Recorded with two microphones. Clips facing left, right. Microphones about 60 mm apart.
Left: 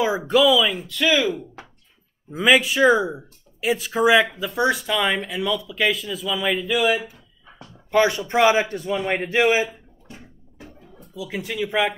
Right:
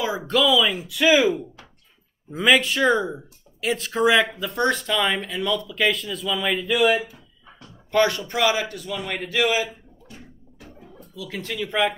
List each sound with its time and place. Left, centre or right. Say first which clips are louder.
0.3 s speech: left 2 dB; centre
2.3 s speech: left 1 dB; centre
7.9 s speech: left 1 dB; centre
8.4 s a man's voice: left 5 dB; left
11.0 s speech: left 3 dB; centre